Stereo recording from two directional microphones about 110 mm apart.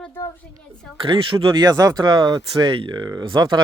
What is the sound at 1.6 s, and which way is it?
Speech, 35° right (ahead or behind).